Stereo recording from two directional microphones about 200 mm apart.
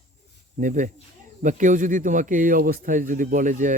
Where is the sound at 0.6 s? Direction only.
40° right (ahead or behind).